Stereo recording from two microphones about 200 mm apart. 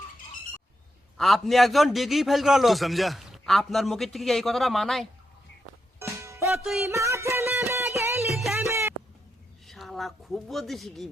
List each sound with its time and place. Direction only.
1.1 s a man's voice: centre (ahead or behind)
6.0 s music: 15° right (ahead or behind)
6.6 s a man's voice: centre (ahead or behind)
6.8 s music: 15° right (ahead or behind)
8.3 s music: centre (ahead or behind)
8.5 s music: 15° right (ahead or behind)
9.6 s speech: centre (ahead or behind)